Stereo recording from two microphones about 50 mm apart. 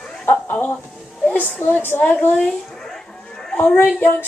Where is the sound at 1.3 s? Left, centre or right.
Left.